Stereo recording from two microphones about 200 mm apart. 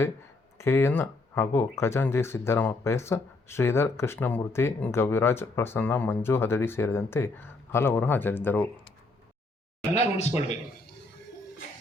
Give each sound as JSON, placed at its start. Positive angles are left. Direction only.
{"t": 0.6, "sound": "speech", "side_deg": 10}
{"t": 9.9, "sound": "speech", "side_deg": 35}